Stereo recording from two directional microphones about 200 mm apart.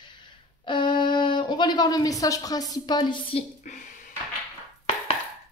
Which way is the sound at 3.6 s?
40° left (ahead or behind).